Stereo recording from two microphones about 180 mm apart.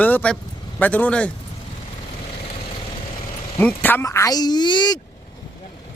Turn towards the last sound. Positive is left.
turn(degrees=25)  # may be behind; listen again after turning